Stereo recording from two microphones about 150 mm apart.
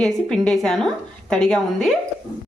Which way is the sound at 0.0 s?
5° left (ahead or behind).